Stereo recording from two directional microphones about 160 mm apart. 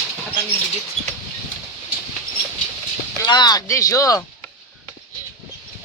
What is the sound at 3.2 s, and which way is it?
Speech, 25° left (ahead or behind).